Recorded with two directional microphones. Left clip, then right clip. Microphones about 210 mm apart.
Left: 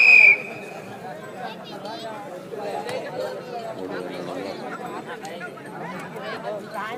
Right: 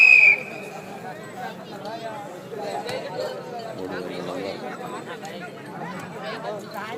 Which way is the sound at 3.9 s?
50° right (ahead or behind).